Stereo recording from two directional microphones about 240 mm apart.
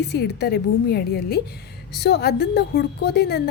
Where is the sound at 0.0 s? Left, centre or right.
Left.